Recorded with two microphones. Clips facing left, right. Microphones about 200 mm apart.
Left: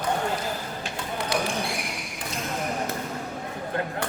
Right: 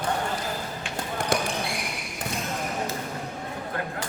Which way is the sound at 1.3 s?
50° right (ahead or behind).